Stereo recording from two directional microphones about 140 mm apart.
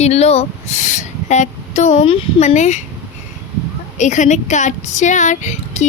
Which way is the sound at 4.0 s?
60° left (ahead or behind).